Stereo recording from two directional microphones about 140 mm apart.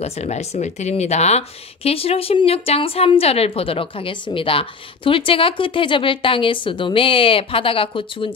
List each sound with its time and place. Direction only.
0.0 s speech: 50° left (ahead or behind)